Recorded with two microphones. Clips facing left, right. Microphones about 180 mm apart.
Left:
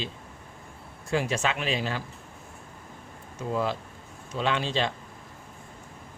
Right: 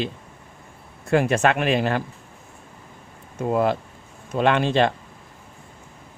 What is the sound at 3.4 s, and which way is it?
Speech, 60° right (ahead or behind).